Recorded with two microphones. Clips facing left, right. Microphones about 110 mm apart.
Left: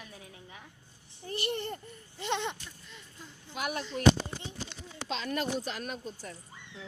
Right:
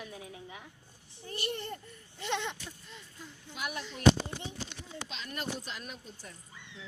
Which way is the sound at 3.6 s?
60° left (ahead or behind).